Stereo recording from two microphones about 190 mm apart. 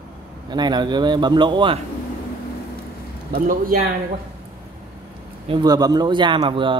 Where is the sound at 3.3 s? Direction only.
45° right (ahead or behind).